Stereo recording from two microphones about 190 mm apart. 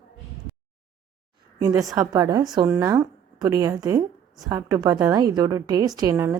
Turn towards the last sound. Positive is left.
turn(degrees=-15)  # may be behind; listen again after turning